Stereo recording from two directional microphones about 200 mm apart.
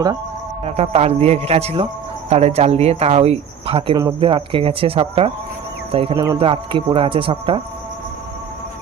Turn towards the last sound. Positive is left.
turn(degrees=-25)  # may be behind; listen again after turning